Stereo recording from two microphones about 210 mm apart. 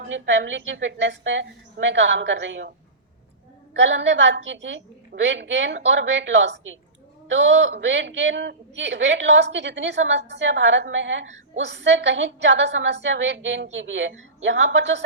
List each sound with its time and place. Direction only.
0.1 s a woman's voice: 60° right (ahead or behind)
3.8 s a woman's voice: 60° right (ahead or behind)